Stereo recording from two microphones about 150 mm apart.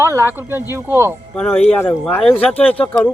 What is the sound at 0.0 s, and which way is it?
Speech, 15° right (ahead or behind).